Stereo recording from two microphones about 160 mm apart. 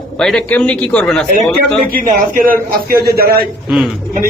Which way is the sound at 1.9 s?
60° right (ahead or behind).